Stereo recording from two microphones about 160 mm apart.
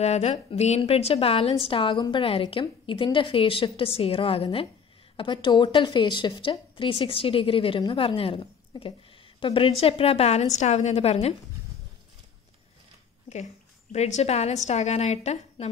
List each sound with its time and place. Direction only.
0.0 s a woman's voice: 45° left (ahead or behind)
13.9 s a woman's voice: 45° left (ahead or behind)